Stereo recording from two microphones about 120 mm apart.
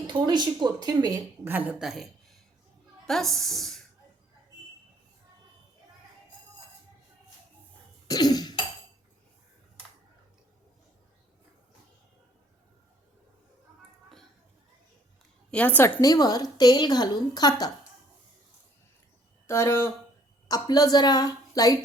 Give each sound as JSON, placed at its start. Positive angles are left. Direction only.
{"t": 0.1, "sound": "speech", "side_deg": -35}
{"t": 1.5, "sound": "a woman's voice", "side_deg": -15}
{"t": 1.8, "sound": "a woman's voice", "side_deg": -5}
{"t": 3.1, "sound": "a woman's voice", "side_deg": 0}
{"t": 8.0, "sound": "cough", "side_deg": 35}
{"t": 15.4, "sound": "a woman's voice", "side_deg": 10}
{"t": 16.0, "sound": "a woman's voice", "side_deg": 30}
{"t": 19.5, "sound": "speech", "side_deg": 20}
{"t": 20.5, "sound": "a woman's voice", "side_deg": 30}